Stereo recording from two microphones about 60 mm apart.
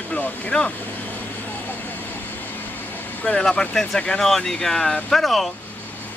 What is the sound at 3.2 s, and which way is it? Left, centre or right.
Speech, centre.